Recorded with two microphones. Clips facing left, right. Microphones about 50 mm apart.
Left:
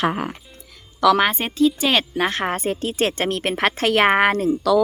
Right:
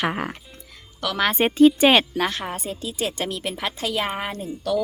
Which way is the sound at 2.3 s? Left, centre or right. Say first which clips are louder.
Left 7 dB; left.